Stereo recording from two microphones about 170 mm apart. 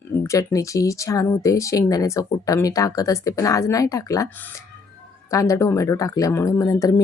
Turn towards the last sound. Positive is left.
turn(degrees=20)  # may be behind; listen again after turning